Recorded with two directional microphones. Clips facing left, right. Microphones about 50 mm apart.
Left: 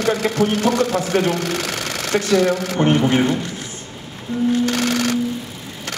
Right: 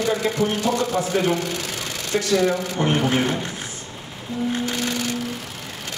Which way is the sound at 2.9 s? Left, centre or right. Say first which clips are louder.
Left 5 dB; left.